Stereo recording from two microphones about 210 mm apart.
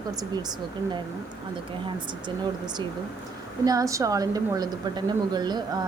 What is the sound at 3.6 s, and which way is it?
A woman's voice, 15° right (ahead or behind).